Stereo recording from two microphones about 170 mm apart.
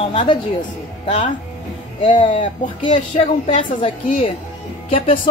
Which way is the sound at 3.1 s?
30° left (ahead or behind).